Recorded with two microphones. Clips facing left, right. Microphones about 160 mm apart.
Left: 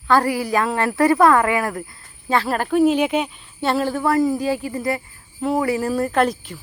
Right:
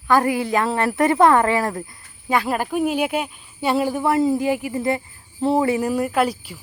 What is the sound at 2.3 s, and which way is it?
Speech, 15° right (ahead or behind).